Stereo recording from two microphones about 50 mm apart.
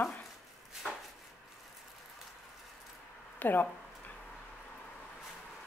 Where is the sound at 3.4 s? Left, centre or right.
Left.